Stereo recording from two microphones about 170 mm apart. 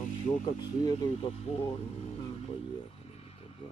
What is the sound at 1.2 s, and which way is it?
Speech, 35° left (ahead or behind).